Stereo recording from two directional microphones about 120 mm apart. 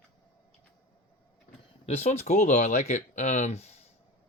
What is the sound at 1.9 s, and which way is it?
Speech, 60° left (ahead or behind).